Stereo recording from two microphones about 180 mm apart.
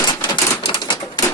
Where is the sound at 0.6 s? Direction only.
30° left (ahead or behind).